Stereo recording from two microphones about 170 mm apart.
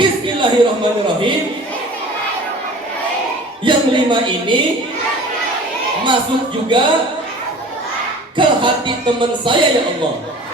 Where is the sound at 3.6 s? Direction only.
30° right (ahead or behind).